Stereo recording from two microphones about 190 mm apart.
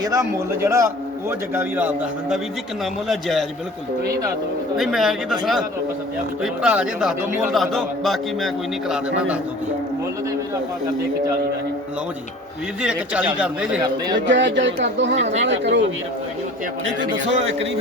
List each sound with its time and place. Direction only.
0.0 s a man's voice: 15° right (ahead or behind); by 3.4 s centre (ahead or behind)
4.8 s speech: centre (ahead or behind)
12.8 s speech: 5° right (ahead or behind)
14.2 s speech: 70° right (ahead or behind)